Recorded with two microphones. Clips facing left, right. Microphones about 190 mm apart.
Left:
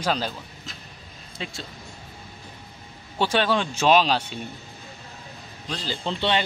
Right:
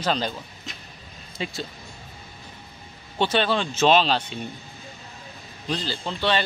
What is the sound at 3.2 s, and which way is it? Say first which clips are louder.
Speech: even; 10° left (ahead or behind).